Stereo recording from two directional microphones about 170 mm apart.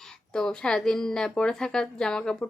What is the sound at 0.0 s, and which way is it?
Speech, 5° left (ahead or behind).